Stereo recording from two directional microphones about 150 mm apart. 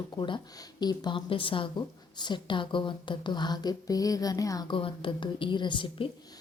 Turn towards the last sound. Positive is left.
turn(degrees=35)  # may be behind; listen again after turning